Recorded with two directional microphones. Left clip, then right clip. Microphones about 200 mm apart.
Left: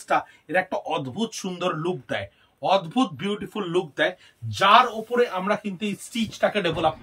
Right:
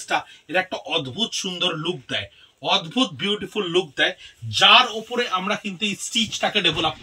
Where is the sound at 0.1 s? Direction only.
10° left (ahead or behind).